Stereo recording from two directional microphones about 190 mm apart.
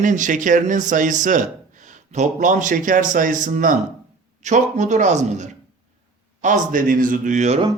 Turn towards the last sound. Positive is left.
turn(degrees=-40)  # may be behind; listen again after turning